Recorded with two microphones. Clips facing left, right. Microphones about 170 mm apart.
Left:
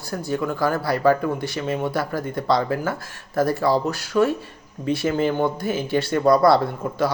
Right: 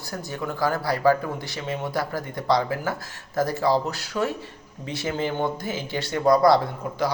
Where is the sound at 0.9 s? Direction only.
20° left (ahead or behind).